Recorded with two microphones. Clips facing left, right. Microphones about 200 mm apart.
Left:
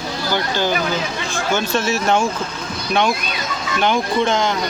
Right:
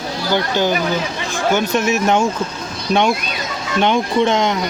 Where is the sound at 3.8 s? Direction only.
25° right (ahead or behind).